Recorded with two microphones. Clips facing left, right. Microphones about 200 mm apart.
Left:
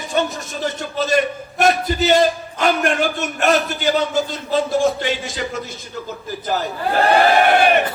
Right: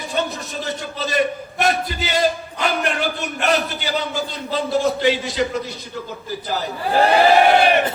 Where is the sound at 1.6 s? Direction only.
45° left (ahead or behind).